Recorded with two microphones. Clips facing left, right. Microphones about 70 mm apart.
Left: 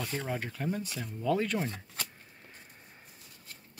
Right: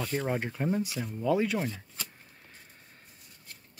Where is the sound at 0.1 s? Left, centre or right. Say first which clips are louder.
Right 4 dB; centre.